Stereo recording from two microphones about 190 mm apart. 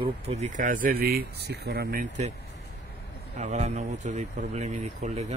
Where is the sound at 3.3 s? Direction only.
35° right (ahead or behind).